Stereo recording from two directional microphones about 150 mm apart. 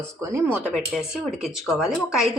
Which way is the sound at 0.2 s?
20° right (ahead or behind).